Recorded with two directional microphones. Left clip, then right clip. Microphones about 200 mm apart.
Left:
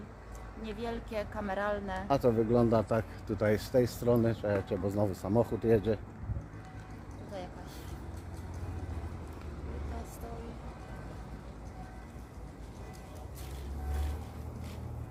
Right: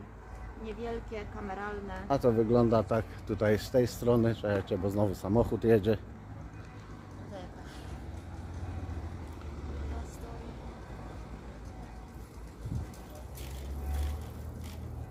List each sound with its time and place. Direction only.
0.6 s a woman's voice: 50° left (ahead or behind)
2.0 s speech: 10° right (ahead or behind)